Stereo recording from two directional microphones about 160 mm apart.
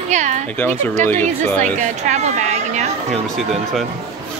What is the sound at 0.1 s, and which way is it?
Speech, 50° right (ahead or behind).